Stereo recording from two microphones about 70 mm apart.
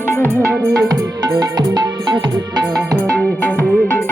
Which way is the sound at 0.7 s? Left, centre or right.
Right.